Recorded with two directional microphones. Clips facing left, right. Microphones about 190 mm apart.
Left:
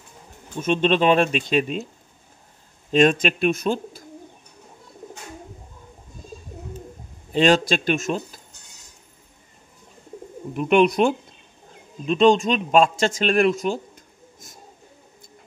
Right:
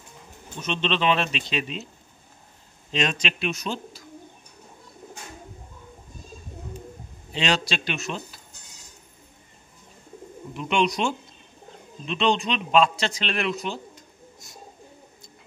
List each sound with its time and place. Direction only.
0.6 s speech: 50° left (ahead or behind)
2.9 s speech: 50° left (ahead or behind)
7.3 s speech: 50° left (ahead or behind)
10.5 s a man's voice: 55° left (ahead or behind)